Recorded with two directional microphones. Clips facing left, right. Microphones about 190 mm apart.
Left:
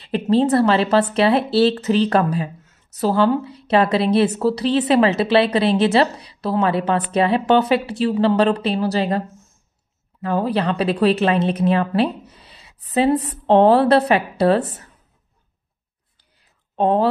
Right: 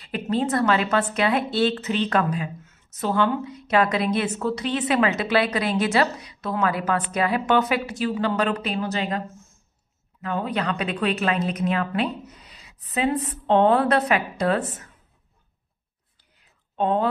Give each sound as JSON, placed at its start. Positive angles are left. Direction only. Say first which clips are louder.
{"t": 0.0, "sound": "a woman's voice", "louder": "left 7 dB", "side_deg": 30}
{"t": 10.2, "sound": "speech", "louder": "left 6 dB", "side_deg": 35}
{"t": 16.7, "sound": "speech", "louder": "left 5 dB", "side_deg": 35}